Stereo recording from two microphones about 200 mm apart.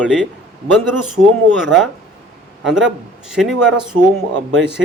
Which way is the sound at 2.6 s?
Centre (ahead or behind).